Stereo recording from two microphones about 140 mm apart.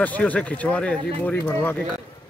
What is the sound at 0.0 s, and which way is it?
Speech, 10° left (ahead or behind).